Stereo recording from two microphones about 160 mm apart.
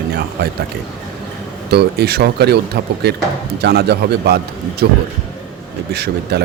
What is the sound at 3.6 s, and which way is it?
Speech, 90° right.